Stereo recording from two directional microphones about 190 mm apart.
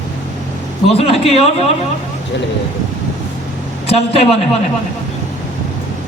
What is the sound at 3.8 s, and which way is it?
Speech, 30° left (ahead or behind).